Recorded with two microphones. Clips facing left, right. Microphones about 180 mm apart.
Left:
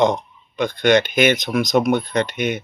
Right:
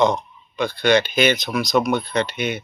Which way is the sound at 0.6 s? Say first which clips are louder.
Left 2 dB; 50° left (ahead or behind).